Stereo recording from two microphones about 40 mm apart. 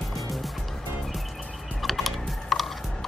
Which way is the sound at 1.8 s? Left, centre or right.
Centre.